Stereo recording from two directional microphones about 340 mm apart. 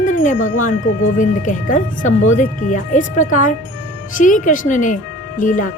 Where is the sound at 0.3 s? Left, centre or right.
Left.